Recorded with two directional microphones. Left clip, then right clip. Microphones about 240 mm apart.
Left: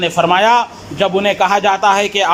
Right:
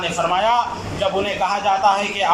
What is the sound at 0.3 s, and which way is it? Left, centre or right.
A man's voice, left.